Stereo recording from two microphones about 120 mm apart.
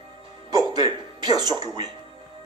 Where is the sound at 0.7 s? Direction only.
35° right (ahead or behind).